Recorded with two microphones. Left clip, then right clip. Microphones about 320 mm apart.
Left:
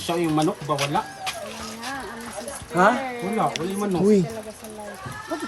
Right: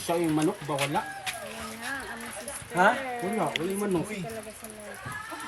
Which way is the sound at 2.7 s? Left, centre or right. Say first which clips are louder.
Left 4 dB; left.